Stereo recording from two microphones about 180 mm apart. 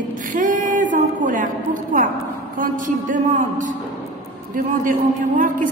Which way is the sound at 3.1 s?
45° right (ahead or behind).